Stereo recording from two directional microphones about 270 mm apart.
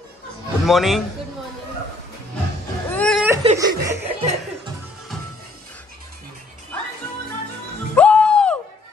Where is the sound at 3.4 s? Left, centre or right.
Centre.